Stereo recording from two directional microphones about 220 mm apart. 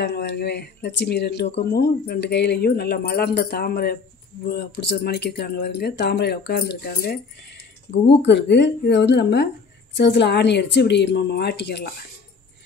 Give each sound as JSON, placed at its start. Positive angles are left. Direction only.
{"t": 0.0, "sound": "speech", "side_deg": 50}
{"t": 8.2, "sound": "speech", "side_deg": 50}